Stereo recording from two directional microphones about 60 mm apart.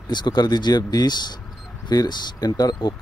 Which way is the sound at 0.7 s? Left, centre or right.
Left.